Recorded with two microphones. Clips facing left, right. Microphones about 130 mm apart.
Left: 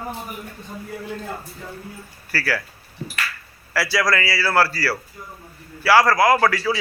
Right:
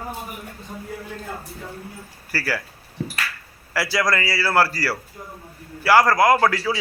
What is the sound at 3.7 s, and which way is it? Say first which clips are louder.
A man's voice: left 1 dB; 20° right (ahead or behind).